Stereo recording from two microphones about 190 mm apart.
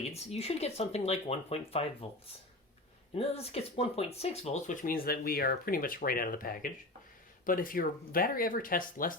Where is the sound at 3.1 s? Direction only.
30° left (ahead or behind).